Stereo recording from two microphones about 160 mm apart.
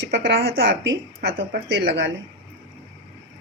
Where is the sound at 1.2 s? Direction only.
90° right.